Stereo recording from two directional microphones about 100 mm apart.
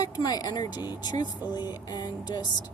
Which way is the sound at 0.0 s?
45° left (ahead or behind).